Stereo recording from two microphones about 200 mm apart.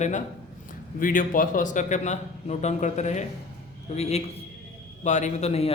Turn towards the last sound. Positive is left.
turn(degrees=30)  # may be behind; listen again after turning